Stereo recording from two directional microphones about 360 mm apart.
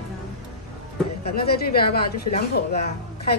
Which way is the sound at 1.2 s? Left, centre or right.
Left.